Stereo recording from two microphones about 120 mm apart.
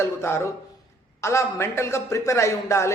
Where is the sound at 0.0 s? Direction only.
25° left (ahead or behind).